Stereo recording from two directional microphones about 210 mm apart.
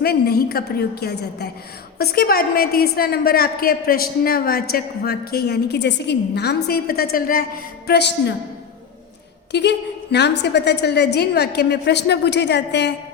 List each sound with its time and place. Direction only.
0.0 s a woman's voice: 50° left (ahead or behind)
9.5 s a woman's voice: 55° left (ahead or behind)